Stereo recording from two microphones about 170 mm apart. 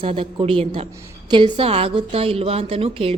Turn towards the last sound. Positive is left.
turn(degrees=-35)  # may be behind; listen again after turning